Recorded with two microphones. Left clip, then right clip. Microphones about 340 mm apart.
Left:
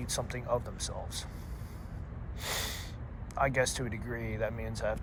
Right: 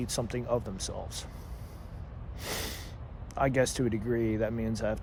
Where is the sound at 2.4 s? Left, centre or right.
Right.